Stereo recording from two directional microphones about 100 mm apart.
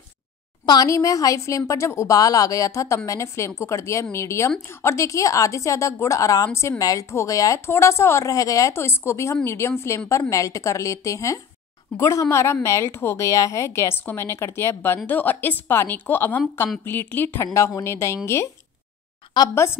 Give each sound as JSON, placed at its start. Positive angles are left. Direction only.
{"t": 0.7, "sound": "a woman's voice", "side_deg": 35}
{"t": 19.5, "sound": "a woman's voice", "side_deg": 25}